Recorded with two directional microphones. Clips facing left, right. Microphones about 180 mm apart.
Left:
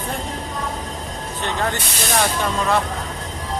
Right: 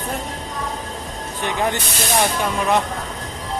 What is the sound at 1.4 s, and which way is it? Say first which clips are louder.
Speech: right 2 dB; 15° right (ahead or behind).